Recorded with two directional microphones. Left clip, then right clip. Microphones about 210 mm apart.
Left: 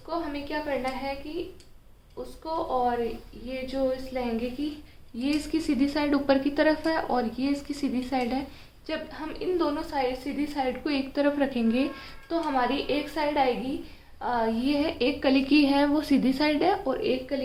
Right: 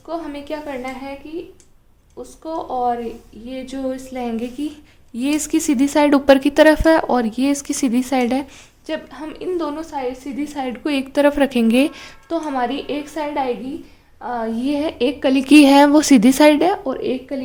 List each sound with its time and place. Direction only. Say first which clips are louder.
0.1 s a woman's voice: right 5 dB; 50° right (ahead or behind)
2.4 s a woman's voice: right 5 dB; 40° right (ahead or behind)
10.5 s a woman's voice: right 6 dB; 50° right (ahead or behind)
14.2 s a sound: right 3 dB; 25° right (ahead or behind)
14.6 s a woman's voice: right 6 dB; 45° right (ahead or behind)